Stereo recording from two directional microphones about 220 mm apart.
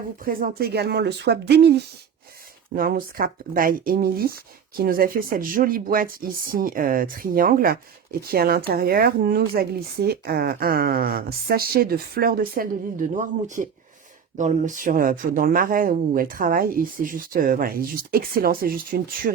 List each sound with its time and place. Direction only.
0.2 s speech: 40° right (ahead or behind)
2.7 s speech: 40° right (ahead or behind)